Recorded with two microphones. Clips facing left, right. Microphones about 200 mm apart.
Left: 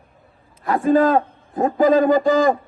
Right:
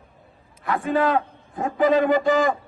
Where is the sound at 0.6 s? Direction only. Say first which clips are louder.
Left 6 dB; 35° left (ahead or behind).